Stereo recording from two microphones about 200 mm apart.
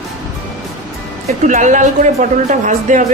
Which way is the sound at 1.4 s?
40° right (ahead or behind).